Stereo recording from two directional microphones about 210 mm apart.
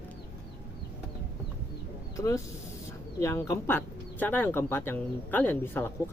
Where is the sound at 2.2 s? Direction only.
15° left (ahead or behind).